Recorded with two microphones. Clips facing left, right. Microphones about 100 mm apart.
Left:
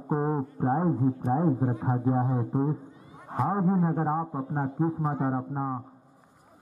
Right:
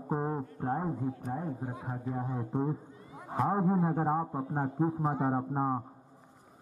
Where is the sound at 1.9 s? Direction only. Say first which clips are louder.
Left 10 dB; 35° left (ahead or behind).